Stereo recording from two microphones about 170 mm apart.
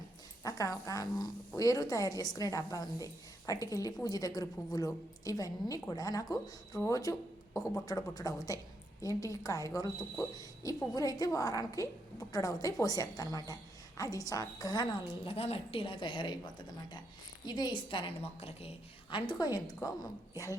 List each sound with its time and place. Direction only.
0.4 s a woman's voice: 20° left (ahead or behind)